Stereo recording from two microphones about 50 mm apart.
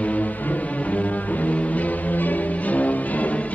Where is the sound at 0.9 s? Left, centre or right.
Left.